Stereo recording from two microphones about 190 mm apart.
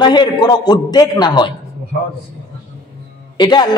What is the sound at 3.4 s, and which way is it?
Speech, 20° left (ahead or behind).